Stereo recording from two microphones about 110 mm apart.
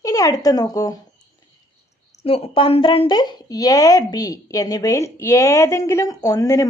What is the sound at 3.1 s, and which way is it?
Speech, 40° left (ahead or behind).